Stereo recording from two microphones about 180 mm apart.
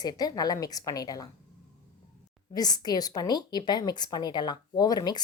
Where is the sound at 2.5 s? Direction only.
20° left (ahead or behind).